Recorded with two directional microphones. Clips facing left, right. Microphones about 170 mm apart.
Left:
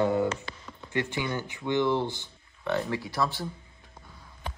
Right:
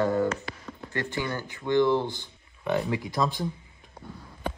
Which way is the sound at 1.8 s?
15° right (ahead or behind).